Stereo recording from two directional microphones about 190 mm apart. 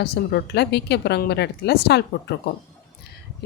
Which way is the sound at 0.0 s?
60° left (ahead or behind).